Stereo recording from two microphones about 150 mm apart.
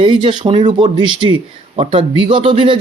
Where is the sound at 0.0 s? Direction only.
35° right (ahead or behind).